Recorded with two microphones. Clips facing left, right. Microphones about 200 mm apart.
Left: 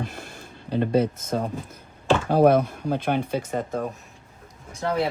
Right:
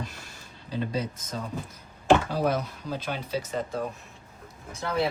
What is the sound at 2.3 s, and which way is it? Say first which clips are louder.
Speech: left 9 dB; 55° left (ahead or behind).